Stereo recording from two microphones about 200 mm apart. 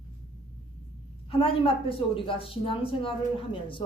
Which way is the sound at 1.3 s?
25° left (ahead or behind).